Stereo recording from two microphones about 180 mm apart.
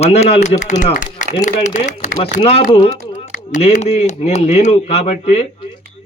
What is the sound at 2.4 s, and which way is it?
Speech, 30° left (ahead or behind).